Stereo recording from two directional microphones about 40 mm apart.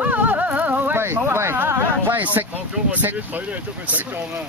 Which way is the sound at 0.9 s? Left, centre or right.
Right.